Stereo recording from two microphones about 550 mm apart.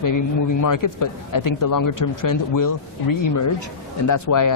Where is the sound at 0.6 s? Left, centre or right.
Left.